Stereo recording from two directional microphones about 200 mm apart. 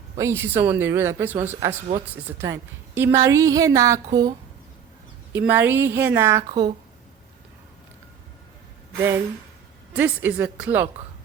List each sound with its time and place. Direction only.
0.2 s a woman's voice: 10° right (ahead or behind)
6.5 s a woman's voice: 30° right (ahead or behind)
9.9 s a woman's voice: 10° right (ahead or behind)